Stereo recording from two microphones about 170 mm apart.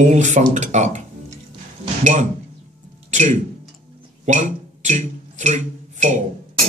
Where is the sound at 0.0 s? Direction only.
45° right (ahead or behind).